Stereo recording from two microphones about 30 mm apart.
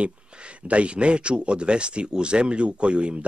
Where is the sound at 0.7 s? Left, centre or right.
Right.